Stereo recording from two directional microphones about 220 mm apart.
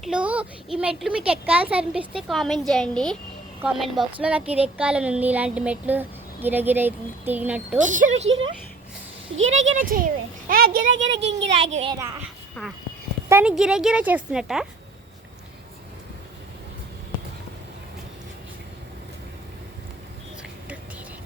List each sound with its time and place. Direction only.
0.0 s a woman's voice: 5° right (ahead or behind)
7.8 s a woman's voice: 35° right (ahead or behind)
9.5 s speech: 60° right (ahead or behind)
9.7 s a woman's voice: 40° right (ahead or behind)
10.8 s speech: 60° right (ahead or behind)
12.6 s speech: 5° left (ahead or behind)
13.2 s a woman's voice: 10° right (ahead or behind)